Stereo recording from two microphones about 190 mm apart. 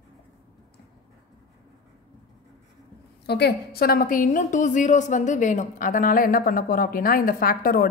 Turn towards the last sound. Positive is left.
turn(degrees=50)  # may be behind; listen again after turning